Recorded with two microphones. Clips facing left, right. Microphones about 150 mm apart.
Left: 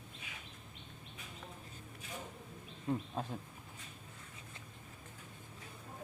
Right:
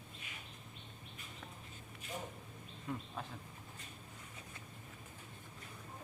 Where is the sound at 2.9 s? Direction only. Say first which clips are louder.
Left 6 dB; 25° left (ahead or behind).